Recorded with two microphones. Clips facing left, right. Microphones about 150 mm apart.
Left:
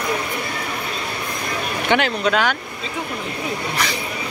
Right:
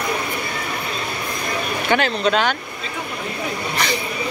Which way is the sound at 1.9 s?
15° left (ahead or behind).